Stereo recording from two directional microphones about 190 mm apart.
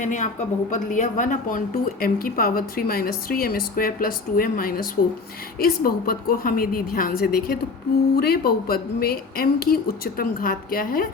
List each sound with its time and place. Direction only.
0.0 s a woman's voice: 40° left (ahead or behind)